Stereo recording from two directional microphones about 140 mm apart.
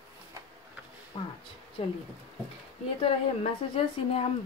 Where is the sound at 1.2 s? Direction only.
40° left (ahead or behind).